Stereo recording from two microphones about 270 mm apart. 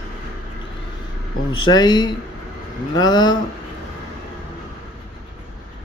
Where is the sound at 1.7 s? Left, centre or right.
Centre.